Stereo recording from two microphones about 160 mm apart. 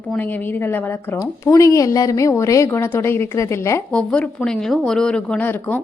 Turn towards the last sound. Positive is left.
turn(degrees=10)  # may be behind; listen again after turning